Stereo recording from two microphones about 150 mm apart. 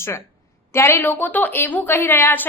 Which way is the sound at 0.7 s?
15° left (ahead or behind).